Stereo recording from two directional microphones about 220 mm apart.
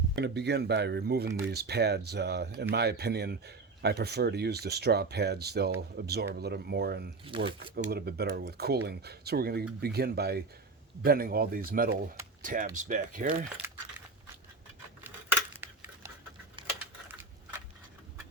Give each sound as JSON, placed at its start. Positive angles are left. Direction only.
{"t": 0.2, "sound": "speech", "side_deg": -50}
{"t": 7.3, "sound": "speech", "side_deg": -25}
{"t": 7.9, "sound": "speech", "side_deg": -45}
{"t": 13.6, "sound": "crumpling", "side_deg": -10}